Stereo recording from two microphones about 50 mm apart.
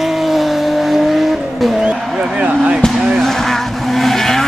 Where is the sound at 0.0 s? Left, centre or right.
Centre.